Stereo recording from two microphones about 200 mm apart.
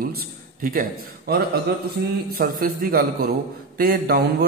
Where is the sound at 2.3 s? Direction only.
45° right (ahead or behind).